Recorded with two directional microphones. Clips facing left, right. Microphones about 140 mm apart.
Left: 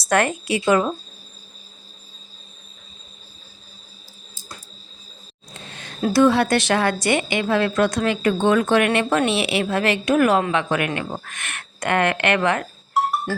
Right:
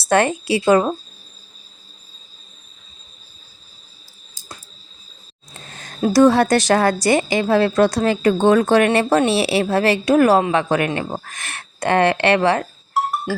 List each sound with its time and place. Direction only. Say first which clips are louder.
0.0 s a woman's voice: right 3 dB; 25° right (ahead or behind)
5.6 s a sound: even; 40° right (ahead or behind)
6.1 s a woman's voice: right 3 dB; 40° right (ahead or behind)